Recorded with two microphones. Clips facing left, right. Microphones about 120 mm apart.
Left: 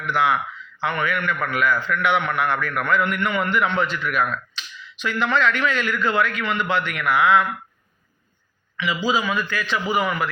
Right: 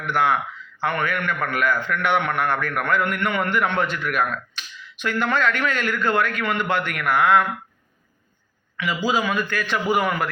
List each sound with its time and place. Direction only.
0.0 s a man's voice: 45° right (ahead or behind)
8.8 s a man's voice: 50° right (ahead or behind)